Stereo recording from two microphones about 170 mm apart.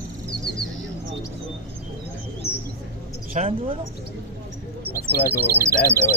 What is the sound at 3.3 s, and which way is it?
Speech, 40° right (ahead or behind).